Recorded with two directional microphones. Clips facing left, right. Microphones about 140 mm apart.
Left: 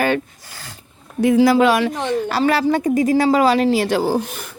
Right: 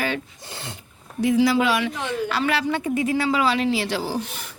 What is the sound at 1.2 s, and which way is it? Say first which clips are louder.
A woman's voice: left 6 dB; 50° left (ahead or behind).